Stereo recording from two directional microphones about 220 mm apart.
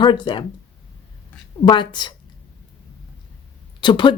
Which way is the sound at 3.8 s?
20° left (ahead or behind).